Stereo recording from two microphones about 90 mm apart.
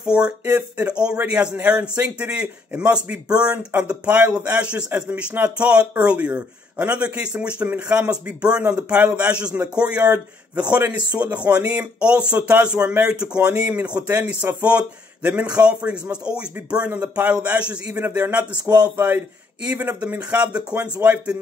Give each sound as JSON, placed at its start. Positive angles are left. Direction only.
{"t": 0.0, "sound": "a man's voice", "side_deg": -10}